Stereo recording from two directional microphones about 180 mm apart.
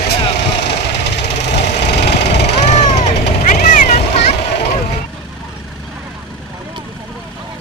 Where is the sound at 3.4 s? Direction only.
45° left (ahead or behind).